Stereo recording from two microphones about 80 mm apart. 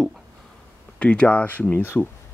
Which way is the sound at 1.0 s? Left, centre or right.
Centre.